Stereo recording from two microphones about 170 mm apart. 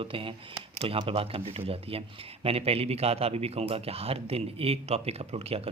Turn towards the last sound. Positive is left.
turn(degrees=-35)  # may be behind; listen again after turning